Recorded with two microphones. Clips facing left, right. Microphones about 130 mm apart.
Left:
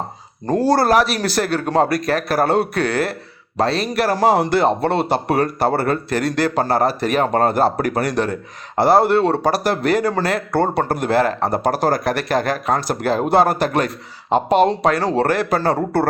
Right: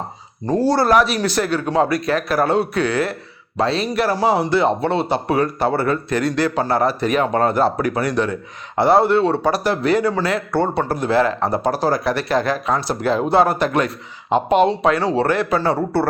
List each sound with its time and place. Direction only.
0.7 s speech: 40° left (ahead or behind)